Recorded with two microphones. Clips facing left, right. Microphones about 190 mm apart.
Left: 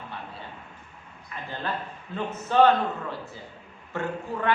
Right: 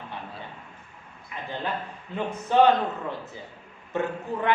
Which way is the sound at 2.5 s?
15° right (ahead or behind).